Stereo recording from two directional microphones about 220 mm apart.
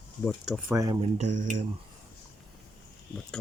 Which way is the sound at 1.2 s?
35° right (ahead or behind).